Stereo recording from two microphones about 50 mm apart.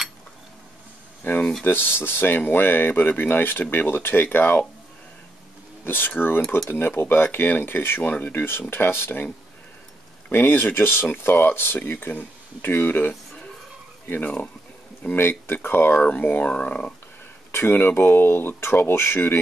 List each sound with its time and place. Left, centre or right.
1.2 s speech: left
1.6 s speech: left
5.9 s speech: left
10.3 s speech: left
15.9 s speech: left
17.5 s speech: left